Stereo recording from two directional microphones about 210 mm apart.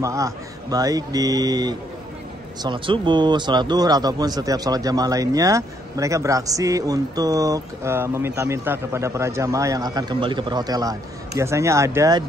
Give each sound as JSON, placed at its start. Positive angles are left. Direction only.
{"t": 0.0, "sound": "speech", "side_deg": -15}